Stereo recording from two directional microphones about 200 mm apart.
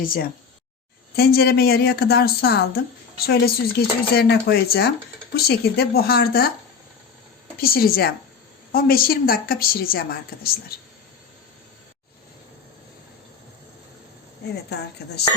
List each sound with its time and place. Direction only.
0.0 s a woman's voice: 45° left (ahead or behind)
7.6 s a woman's voice: 50° left (ahead or behind)
14.5 s a woman's voice: 55° left (ahead or behind)